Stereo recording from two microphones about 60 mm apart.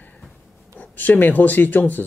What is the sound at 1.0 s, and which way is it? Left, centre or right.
Speech, left.